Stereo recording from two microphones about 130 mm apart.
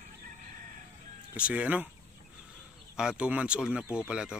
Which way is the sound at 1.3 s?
10° right (ahead or behind).